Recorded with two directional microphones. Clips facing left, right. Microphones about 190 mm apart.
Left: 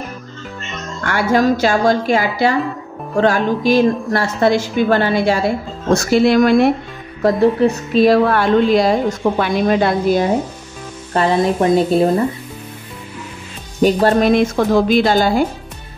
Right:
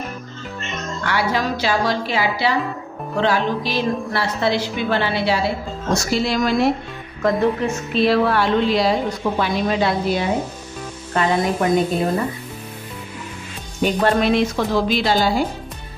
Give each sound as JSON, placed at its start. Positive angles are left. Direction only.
{"t": 1.0, "sound": "a woman's voice", "side_deg": 50}
{"t": 5.9, "sound": "speech", "side_deg": 55}
{"t": 7.2, "sound": "a woman's voice", "side_deg": 35}
{"t": 11.1, "sound": "speech", "side_deg": 30}
{"t": 13.7, "sound": "a woman's voice", "side_deg": 40}